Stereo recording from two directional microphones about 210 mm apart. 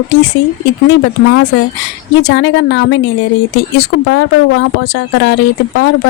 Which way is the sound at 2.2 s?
55° left (ahead or behind).